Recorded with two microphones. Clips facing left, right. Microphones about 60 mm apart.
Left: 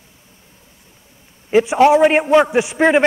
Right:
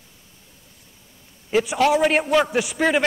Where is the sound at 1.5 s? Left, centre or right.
Left.